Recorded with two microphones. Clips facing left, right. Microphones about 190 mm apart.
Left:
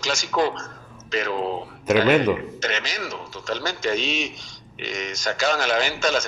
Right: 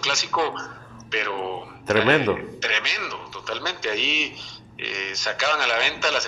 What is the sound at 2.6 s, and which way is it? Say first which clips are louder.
A man's voice: left 3 dB; 45° left (ahead or behind).